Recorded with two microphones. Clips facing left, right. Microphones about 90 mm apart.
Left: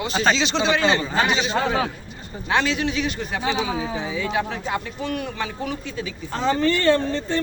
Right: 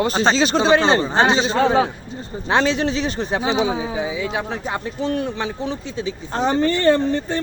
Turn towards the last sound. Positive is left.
turn(degrees=-20)  # may be behind; listen again after turning